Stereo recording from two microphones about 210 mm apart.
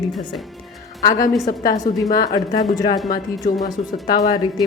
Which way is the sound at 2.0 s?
15° left (ahead or behind).